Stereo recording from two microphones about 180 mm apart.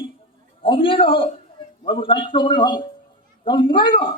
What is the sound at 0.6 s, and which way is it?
A man's voice, 30° left (ahead or behind).